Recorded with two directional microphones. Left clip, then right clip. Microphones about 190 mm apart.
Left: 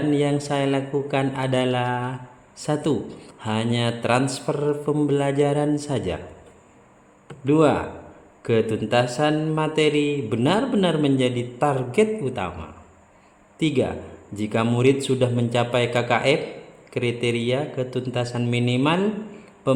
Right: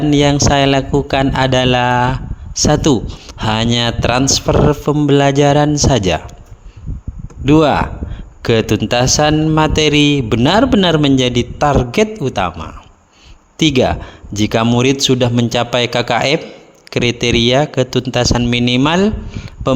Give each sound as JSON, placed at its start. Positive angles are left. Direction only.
{"t": 0.1, "sound": "a man's voice", "side_deg": -50}
{"t": 7.4, "sound": "a man's voice", "side_deg": -55}